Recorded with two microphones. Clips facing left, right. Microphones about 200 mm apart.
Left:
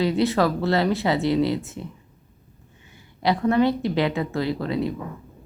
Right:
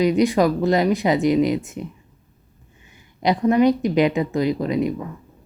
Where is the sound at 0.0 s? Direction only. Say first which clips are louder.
Right 4 dB; 15° right (ahead or behind).